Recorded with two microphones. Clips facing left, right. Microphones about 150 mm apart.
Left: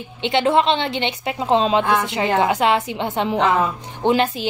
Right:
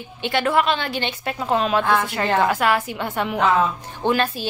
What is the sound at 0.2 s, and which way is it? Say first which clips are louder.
Speech: left 3 dB; 20° left (ahead or behind).